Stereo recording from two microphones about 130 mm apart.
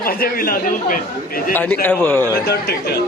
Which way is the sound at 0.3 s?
90° left.